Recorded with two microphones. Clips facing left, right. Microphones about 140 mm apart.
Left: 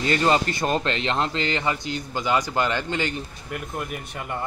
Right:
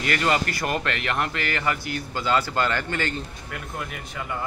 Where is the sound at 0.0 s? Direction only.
25° left (ahead or behind).